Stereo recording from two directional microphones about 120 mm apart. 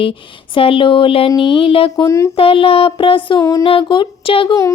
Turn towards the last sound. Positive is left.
turn(degrees=45)  # may be behind; listen again after turning